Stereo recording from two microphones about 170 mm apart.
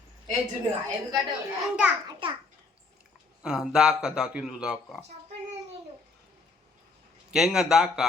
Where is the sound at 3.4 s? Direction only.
5° right (ahead or behind).